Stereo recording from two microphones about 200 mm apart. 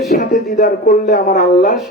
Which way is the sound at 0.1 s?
45° left (ahead or behind).